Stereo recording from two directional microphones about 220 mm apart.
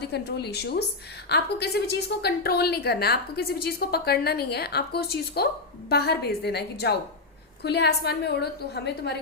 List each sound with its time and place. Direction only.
0.1 s a woman's voice: 50° left (ahead or behind)